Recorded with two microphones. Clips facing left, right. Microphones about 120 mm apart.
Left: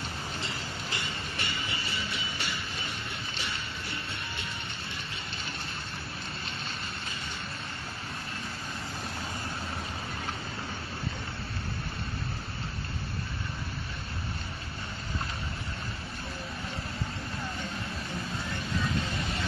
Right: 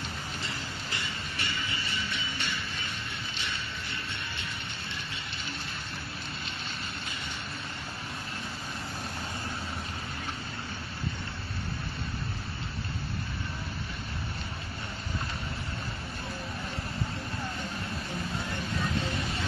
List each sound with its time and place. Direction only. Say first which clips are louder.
0.9 s music: even; 30° left (ahead or behind)